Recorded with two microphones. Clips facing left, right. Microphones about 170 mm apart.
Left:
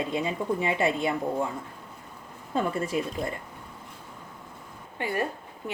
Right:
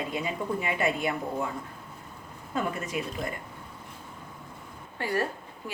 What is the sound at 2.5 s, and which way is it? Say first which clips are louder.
Speech: left 4 dB; 30° left (ahead or behind).